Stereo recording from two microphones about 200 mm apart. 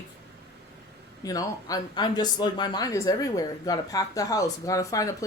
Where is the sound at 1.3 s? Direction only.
20° left (ahead or behind).